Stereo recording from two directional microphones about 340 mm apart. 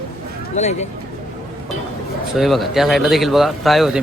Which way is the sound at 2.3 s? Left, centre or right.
Centre.